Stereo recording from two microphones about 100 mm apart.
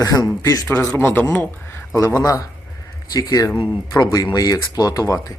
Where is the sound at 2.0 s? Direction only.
35° left (ahead or behind).